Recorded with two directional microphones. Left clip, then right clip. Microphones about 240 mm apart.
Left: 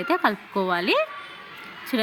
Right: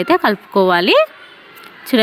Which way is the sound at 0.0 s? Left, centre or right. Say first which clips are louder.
Right 8 dB; right.